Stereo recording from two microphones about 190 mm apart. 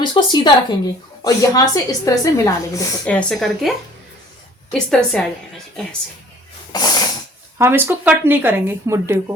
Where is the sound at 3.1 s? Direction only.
5° left (ahead or behind).